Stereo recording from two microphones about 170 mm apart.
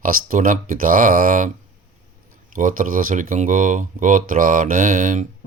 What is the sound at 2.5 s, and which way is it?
Speech, 50° right (ahead or behind).